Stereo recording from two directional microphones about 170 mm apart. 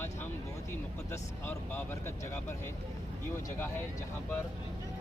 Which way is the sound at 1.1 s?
15° left (ahead or behind).